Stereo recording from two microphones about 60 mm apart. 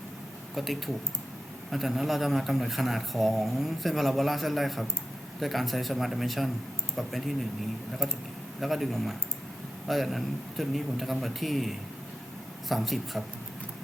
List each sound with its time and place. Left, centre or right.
0.5 s a man's voice: centre
8.6 s a man's voice: centre